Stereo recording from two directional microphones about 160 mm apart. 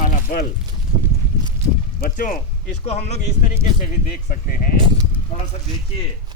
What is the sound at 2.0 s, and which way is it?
Speech, 55° left (ahead or behind).